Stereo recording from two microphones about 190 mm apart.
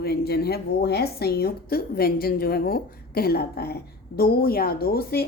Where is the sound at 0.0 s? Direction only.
55° left (ahead or behind).